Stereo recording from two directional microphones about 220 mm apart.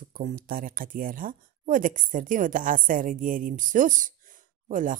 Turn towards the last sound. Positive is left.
turn(degrees=-35)  # may be behind; listen again after turning